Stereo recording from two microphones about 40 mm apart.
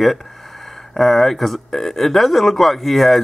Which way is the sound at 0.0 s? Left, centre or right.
Centre.